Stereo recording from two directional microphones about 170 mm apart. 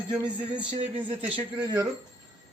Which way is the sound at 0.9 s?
5° right (ahead or behind).